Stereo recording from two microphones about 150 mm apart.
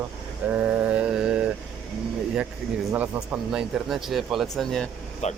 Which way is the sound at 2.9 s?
10° right (ahead or behind).